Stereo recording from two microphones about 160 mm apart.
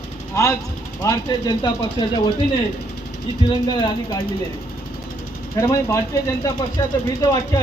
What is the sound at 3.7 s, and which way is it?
Speech, 25° left (ahead or behind).